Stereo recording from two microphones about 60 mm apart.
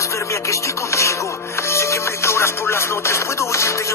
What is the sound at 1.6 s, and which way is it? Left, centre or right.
Music, left.